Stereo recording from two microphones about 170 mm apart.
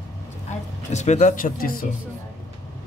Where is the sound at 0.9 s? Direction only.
45° left (ahead or behind).